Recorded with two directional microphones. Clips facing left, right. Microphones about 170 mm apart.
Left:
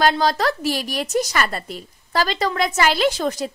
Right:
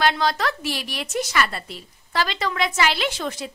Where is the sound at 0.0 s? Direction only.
40° left (ahead or behind).